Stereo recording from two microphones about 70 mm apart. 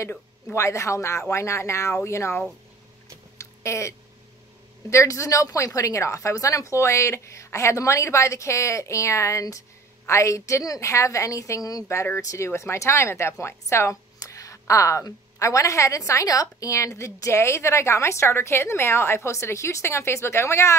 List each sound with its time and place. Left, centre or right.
0.1 s a woman's voice: left
3.3 s a sound: left
4.8 s a woman's voice: left
11.9 s a woman's voice: left
14.2 s a woman's voice: left